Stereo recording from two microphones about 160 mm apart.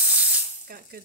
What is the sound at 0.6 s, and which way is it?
Speech, 65° right (ahead or behind).